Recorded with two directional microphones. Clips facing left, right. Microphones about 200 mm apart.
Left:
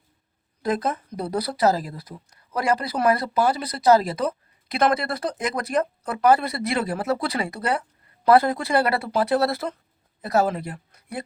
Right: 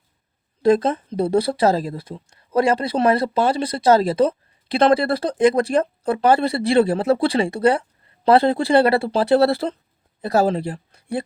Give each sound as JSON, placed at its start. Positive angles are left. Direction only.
{"t": 0.6, "sound": "speech", "side_deg": -30}